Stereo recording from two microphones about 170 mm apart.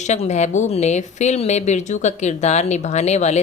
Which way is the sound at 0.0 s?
45° left (ahead or behind).